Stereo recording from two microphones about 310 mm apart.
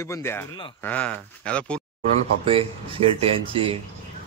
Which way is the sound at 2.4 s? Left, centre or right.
Centre.